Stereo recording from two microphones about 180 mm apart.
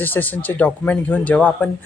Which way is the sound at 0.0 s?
10° left (ahead or behind).